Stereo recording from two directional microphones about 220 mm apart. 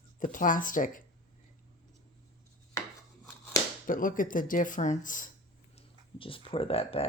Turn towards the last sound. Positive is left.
turn(degrees=25)  # may be behind; listen again after turning